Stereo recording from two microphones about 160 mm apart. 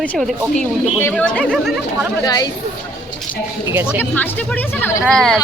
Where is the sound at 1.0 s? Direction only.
10° left (ahead or behind).